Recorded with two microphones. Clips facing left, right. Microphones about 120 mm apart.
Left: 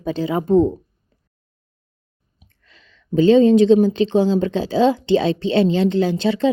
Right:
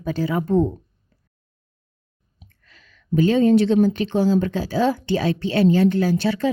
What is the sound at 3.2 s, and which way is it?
A woman's voice, 25° left (ahead or behind).